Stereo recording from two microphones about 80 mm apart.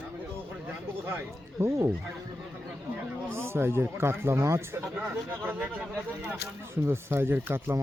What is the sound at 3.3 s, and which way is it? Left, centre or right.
Speech, right.